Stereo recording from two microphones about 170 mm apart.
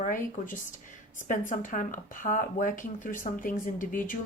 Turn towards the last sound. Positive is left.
turn(degrees=50)  # may be behind; listen again after turning